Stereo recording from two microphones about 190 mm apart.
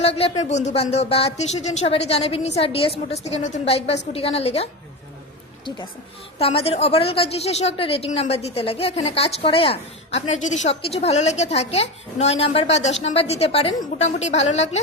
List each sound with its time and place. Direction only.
0.0 s a woman's voice: 30° left (ahead or behind)
6.4 s a woman's voice: 30° left (ahead or behind)